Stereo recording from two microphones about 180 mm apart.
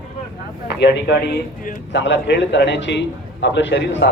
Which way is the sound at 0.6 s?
70° left (ahead or behind).